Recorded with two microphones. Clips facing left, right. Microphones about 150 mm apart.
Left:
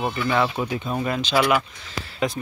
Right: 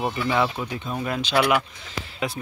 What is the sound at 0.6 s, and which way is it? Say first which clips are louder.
Speech: left 4 dB; 20° left (ahead or behind).